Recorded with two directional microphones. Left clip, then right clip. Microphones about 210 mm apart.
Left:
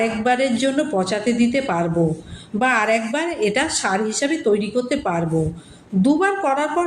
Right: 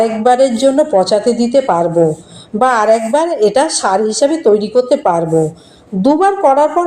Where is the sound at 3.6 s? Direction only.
15° right (ahead or behind).